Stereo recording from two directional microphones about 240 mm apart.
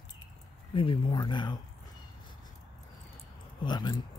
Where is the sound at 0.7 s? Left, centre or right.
Left.